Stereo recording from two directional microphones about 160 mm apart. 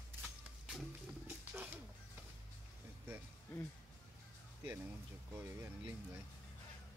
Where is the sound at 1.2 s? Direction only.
10° right (ahead or behind).